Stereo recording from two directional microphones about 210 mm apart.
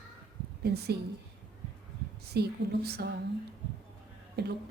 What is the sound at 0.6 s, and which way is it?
Speech, 50° right (ahead or behind).